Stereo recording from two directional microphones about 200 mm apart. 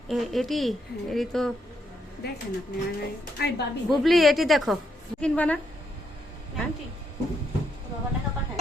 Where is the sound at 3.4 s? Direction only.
55° left (ahead or behind).